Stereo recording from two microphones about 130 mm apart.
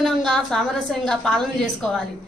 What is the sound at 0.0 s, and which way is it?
A woman's voice, 5° left (ahead or behind).